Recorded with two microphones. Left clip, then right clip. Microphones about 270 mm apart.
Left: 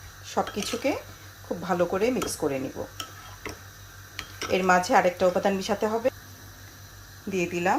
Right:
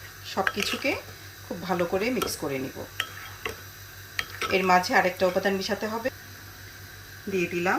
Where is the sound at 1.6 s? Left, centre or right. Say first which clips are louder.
Left 2 dB; centre.